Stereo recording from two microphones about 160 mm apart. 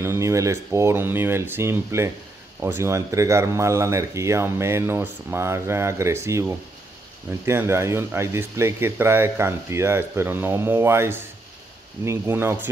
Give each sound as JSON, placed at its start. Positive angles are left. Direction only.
{"t": 0.0, "sound": "speech", "side_deg": -20}